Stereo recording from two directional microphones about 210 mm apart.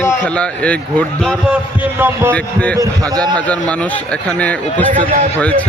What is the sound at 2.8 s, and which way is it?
Speech, 20° right (ahead or behind).